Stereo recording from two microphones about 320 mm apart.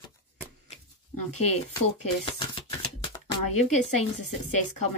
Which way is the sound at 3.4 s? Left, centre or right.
Left.